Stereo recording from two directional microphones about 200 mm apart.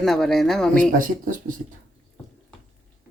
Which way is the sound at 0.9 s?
40° right (ahead or behind).